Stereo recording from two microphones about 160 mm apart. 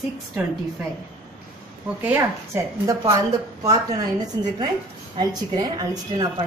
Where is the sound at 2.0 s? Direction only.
15° right (ahead or behind).